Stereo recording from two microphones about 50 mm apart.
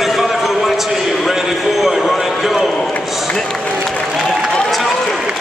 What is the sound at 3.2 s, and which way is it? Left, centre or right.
Run, centre.